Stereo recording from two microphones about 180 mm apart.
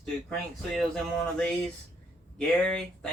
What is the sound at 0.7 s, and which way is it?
Speech, 5° left (ahead or behind).